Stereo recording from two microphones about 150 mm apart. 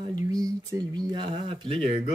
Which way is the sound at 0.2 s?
25° right (ahead or behind).